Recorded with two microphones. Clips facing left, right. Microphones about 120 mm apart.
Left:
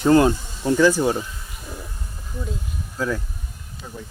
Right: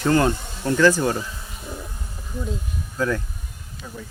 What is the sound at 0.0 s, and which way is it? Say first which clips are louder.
Speech: left 4 dB; 20° left (ahead or behind).